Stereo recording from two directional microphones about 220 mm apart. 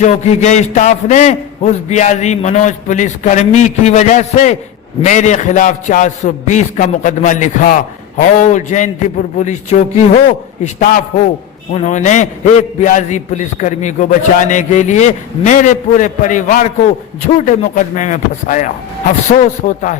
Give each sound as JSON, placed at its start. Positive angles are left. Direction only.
{"t": 0.0, "sound": "a man's voice", "side_deg": 30}